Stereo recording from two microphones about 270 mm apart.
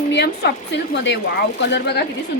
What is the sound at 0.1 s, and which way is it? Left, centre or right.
A woman's voice, left.